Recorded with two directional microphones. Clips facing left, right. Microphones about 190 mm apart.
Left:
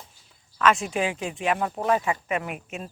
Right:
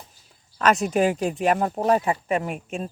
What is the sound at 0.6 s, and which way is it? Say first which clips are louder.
Speech: right 3 dB; 40° right (ahead or behind).